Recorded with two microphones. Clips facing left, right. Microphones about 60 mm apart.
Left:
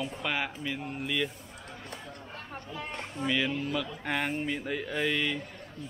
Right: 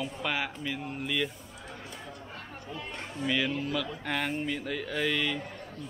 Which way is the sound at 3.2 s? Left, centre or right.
Centre.